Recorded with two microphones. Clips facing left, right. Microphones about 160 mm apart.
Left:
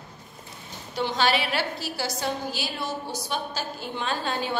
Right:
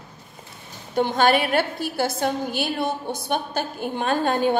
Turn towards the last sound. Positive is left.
turn(degrees=-50)  # may be behind; listen again after turning